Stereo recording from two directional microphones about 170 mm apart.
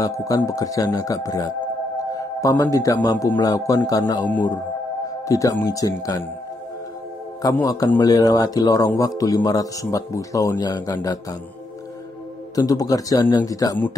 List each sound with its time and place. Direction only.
0.0 s a man's voice: 20° left (ahead or behind)
5.3 s speech: 20° left (ahead or behind)
7.4 s speech: 20° left (ahead or behind)
12.5 s speech: 20° left (ahead or behind)